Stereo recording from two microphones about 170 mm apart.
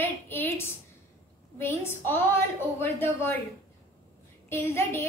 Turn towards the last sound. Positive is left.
turn(degrees=15)  # may be behind; listen again after turning